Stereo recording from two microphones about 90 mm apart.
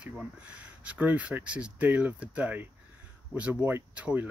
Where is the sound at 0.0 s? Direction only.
15° right (ahead or behind).